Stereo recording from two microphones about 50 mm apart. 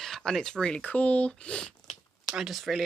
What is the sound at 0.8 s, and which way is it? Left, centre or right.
Speech, left.